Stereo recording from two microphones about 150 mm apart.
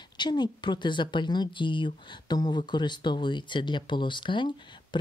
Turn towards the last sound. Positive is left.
turn(degrees=30)  # may be behind; listen again after turning